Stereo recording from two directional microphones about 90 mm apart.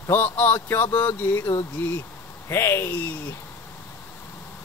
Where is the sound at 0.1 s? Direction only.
20° left (ahead or behind).